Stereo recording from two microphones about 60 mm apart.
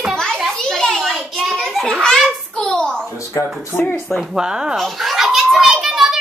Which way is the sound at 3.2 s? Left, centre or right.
Left.